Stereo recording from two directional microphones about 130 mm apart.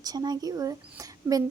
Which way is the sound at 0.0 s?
30° right (ahead or behind).